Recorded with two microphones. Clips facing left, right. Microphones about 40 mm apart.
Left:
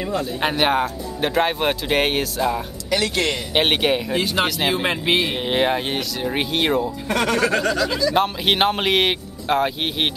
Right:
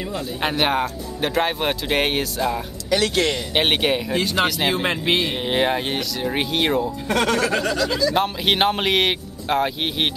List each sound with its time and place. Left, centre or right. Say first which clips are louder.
0.1 s speech: left 2 dB; centre
3.0 s speech: right 1 dB; left
3.5 s speech: left 2 dB; centre